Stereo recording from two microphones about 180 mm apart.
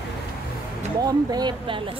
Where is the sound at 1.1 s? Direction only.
25° right (ahead or behind).